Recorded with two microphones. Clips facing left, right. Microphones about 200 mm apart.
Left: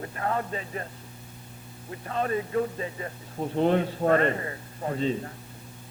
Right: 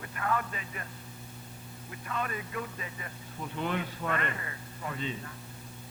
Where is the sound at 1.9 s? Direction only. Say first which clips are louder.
Left 8 dB; 35° left (ahead or behind).